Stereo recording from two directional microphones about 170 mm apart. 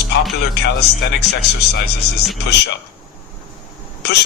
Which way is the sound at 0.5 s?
75° left (ahead or behind).